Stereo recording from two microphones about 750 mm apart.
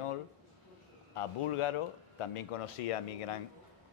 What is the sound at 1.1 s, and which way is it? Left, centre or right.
Speech, left.